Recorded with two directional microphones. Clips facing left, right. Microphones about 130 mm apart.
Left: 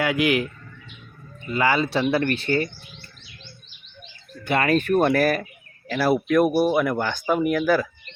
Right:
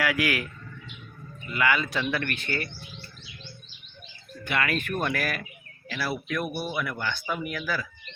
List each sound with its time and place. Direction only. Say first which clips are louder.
0.0 s speech: left 5 dB; 20° left (ahead or behind)
4.4 s speech: left 8 dB; 35° left (ahead or behind)